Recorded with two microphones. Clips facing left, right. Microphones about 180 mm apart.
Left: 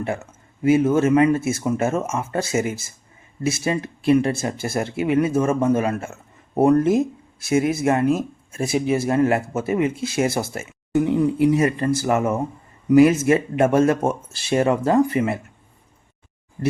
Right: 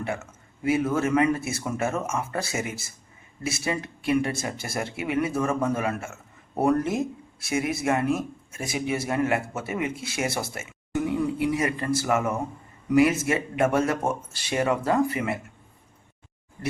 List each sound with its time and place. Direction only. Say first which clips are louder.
0.6 s speech: left 7 dB; 25° left (ahead or behind)